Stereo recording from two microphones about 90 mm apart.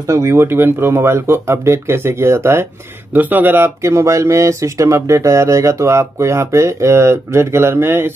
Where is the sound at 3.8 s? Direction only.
30° right (ahead or behind).